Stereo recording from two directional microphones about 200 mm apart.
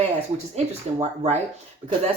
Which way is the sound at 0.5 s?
35° right (ahead or behind).